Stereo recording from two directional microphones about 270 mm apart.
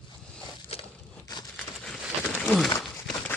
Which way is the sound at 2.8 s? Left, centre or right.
Centre.